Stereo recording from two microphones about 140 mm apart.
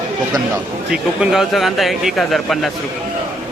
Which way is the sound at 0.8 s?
5° right (ahead or behind).